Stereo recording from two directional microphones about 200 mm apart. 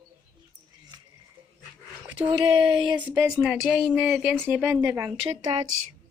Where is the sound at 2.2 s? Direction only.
20° right (ahead or behind).